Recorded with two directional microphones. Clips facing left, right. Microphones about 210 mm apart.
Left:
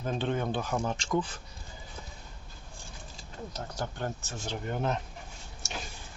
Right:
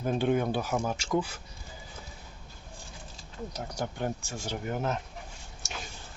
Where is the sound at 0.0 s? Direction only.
10° right (ahead or behind).